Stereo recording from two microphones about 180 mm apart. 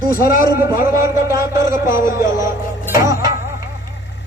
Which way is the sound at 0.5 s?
20° right (ahead or behind).